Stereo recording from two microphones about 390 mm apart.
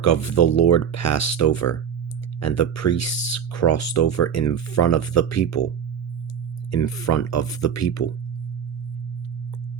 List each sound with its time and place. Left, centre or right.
0.0 s speech: left
6.7 s speech: left